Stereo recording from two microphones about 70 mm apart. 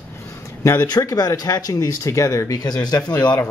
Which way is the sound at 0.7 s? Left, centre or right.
Left.